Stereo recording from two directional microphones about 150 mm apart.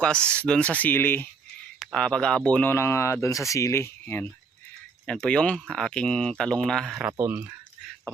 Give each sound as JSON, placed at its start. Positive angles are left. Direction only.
{"t": 0.3, "sound": "speech", "side_deg": 5}
{"t": 7.1, "sound": "speech", "side_deg": -15}